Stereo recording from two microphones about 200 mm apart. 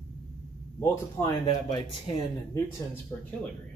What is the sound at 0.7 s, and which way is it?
Speech, 20° left (ahead or behind).